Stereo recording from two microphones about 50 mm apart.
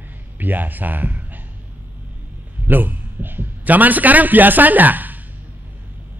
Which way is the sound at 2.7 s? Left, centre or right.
Right.